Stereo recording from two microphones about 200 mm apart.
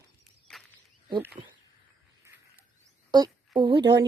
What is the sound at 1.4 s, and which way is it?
Speech, 30° right (ahead or behind).